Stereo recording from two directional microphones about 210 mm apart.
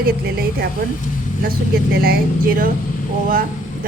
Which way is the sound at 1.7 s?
45° right (ahead or behind).